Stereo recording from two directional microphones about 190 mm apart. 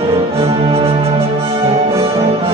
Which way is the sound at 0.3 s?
30° right (ahead or behind).